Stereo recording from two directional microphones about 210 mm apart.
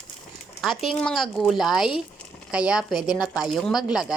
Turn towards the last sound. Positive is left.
turn(degrees=0)  # may be behind; listen again after turning